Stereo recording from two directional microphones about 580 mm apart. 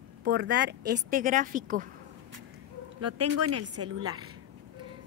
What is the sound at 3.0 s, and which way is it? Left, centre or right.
Speech, right.